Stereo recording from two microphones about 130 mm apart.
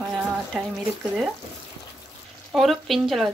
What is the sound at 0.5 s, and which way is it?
Speech, 5° right (ahead or behind).